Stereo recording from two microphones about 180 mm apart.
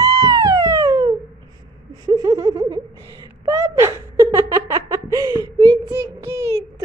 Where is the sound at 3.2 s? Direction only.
15° right (ahead or behind).